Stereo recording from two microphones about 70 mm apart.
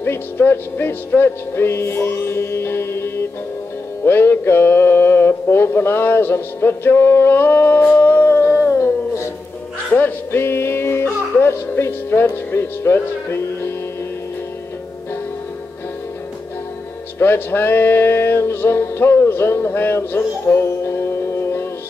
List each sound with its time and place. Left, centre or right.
0.0 s music: left
9.9 s music: left
11.6 s speech: left
17.2 s music: left